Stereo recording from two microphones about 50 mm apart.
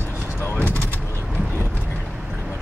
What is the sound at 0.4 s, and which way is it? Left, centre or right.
Vehicle, left.